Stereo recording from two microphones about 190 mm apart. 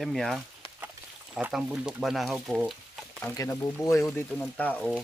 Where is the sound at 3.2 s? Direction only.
15° left (ahead or behind).